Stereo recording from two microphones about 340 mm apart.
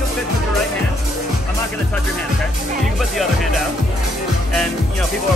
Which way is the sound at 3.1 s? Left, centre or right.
Centre.